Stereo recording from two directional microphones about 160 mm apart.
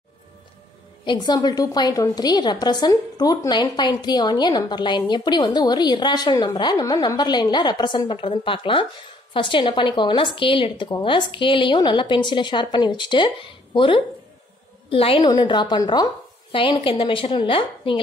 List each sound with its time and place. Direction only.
1.0 s a woman's voice: 25° left (ahead or behind)